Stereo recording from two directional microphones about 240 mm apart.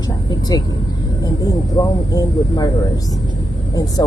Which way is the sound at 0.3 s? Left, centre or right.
Centre.